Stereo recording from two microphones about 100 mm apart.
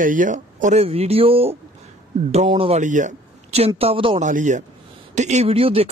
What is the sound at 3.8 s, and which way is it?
Speech, 70° right (ahead or behind).